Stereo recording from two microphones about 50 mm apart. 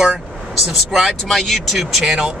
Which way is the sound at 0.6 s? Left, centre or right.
Centre.